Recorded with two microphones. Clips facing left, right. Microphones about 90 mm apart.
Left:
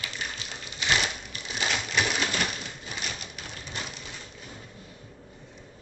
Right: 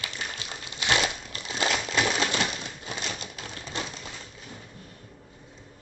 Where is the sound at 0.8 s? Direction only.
25° right (ahead or behind).